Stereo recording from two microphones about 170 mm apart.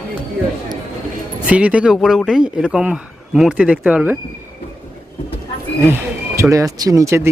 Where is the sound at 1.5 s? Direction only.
10° right (ahead or behind).